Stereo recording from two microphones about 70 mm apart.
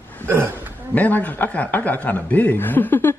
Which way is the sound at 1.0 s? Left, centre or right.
Left.